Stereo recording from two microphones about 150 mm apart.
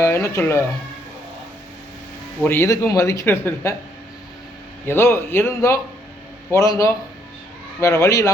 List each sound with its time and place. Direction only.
0.0 s speech: 20° left (ahead or behind)
2.4 s speech: 15° left (ahead or behind)
4.9 s speech: 15° left (ahead or behind)